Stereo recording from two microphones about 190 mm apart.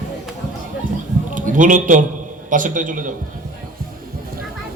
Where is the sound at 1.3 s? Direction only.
45° right (ahead or behind).